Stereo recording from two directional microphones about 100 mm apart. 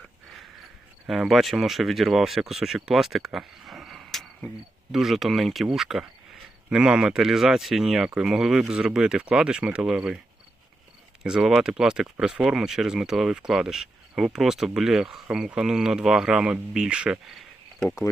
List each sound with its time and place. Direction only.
1.0 s speech: centre (ahead or behind)
11.2 s speech: 5° right (ahead or behind)
17.8 s speech: 30° left (ahead or behind)